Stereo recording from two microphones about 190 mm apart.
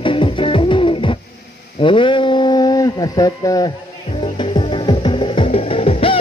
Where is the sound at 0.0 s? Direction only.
25° left (ahead or behind).